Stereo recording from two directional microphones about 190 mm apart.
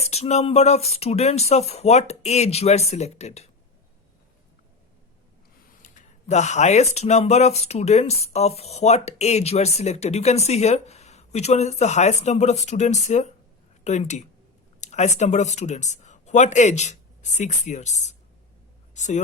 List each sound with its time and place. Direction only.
0.0 s speech: 35° left (ahead or behind)
5.8 s speech: 40° left (ahead or behind)